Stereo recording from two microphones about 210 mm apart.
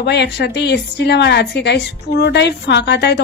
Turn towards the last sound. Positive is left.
turn(degrees=55)  # may be behind; listen again after turning